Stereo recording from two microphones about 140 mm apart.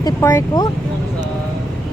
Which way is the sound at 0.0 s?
20° left (ahead or behind).